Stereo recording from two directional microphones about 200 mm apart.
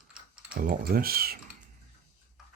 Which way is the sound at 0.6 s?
45° right (ahead or behind).